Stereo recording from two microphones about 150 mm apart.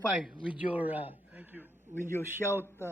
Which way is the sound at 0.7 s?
10° right (ahead or behind).